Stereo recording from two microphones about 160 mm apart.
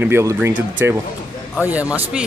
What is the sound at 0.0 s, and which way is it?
Speech, 15° right (ahead or behind).